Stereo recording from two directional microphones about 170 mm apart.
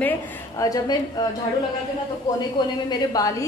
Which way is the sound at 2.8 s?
20° left (ahead or behind).